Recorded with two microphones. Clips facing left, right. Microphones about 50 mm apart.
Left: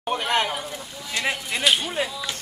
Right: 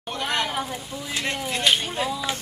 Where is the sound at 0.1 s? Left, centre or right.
Left.